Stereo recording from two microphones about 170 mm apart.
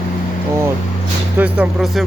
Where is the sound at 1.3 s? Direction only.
10° right (ahead or behind).